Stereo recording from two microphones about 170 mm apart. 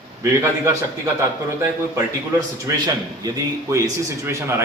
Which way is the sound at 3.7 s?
15° right (ahead or behind).